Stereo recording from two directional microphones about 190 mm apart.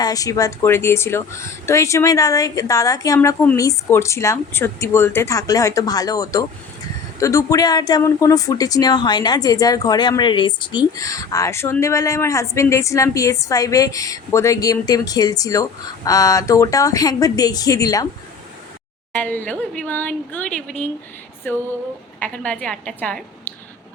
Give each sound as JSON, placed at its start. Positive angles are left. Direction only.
{"t": 0.0, "sound": "speech", "side_deg": 20}
{"t": 19.1, "sound": "speech", "side_deg": 10}